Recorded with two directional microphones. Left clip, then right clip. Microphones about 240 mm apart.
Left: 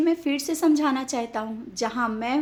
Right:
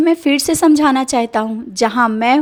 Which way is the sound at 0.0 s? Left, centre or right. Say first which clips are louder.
Right 10 dB; right.